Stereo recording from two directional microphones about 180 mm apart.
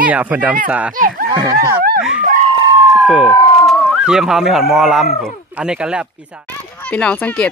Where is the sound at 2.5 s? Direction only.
25° right (ahead or behind).